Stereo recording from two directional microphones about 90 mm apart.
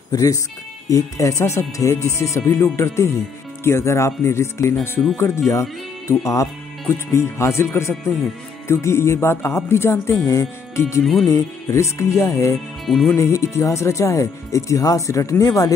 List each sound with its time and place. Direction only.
0.1 s speech: 40° left (ahead or behind)
11.0 s speech: centre (ahead or behind)
11.2 s speech: 35° left (ahead or behind)
12.8 s speech: centre (ahead or behind)
13.2 s speech: 35° left (ahead or behind)